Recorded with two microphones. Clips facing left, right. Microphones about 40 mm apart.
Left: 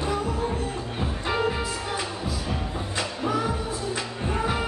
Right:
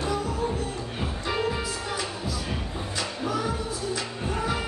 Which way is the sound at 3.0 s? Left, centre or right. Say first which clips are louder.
Left 2 dB; centre.